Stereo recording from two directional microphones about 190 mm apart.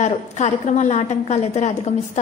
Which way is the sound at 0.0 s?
35° left (ahead or behind).